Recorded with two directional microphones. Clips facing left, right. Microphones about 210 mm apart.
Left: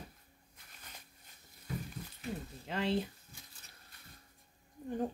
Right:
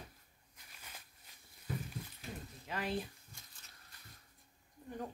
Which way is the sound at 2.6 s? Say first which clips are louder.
Left 5 dB; 25° left (ahead or behind).